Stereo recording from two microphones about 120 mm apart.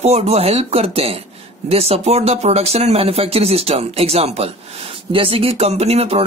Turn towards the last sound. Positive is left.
turn(degrees=-60)  # may be behind; listen again after turning